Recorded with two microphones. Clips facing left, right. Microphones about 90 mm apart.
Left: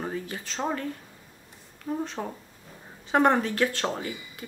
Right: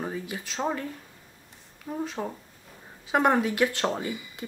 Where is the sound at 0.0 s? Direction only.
5° right (ahead or behind).